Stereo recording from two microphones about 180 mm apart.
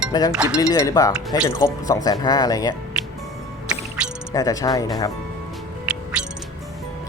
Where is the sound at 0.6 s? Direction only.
20° left (ahead or behind).